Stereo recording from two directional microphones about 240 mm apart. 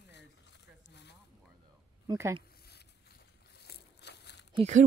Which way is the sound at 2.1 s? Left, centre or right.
Centre.